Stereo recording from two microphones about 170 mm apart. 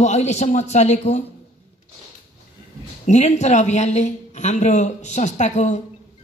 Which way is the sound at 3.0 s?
45° left (ahead or behind).